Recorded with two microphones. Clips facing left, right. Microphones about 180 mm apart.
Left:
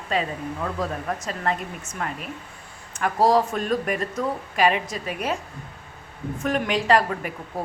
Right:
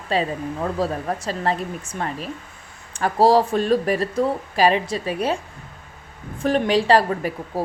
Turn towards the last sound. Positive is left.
turn(degrees=-30)  # may be behind; listen again after turning